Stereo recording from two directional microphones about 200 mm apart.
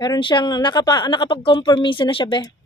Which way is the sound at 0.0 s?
20° left (ahead or behind).